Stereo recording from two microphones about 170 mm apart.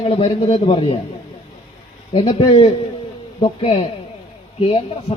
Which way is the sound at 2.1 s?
35° left (ahead or behind).